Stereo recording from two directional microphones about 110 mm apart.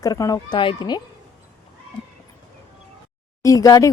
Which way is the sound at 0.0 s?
30° left (ahead or behind).